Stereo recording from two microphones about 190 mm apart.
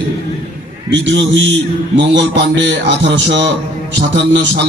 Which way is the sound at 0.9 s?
70° right (ahead or behind).